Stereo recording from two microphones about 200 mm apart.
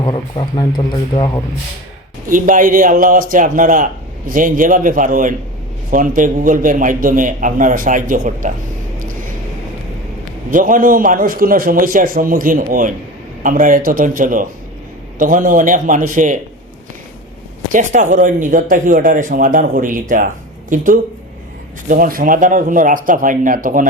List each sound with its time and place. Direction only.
0.0 s speech: 25° left (ahead or behind)
2.3 s speech: 40° right (ahead or behind)
10.5 s a man's voice: 40° right (ahead or behind)
17.7 s speech: 40° right (ahead or behind)